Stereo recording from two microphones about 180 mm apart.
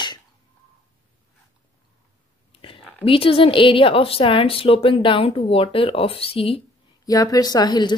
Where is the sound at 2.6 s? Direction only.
30° left (ahead or behind).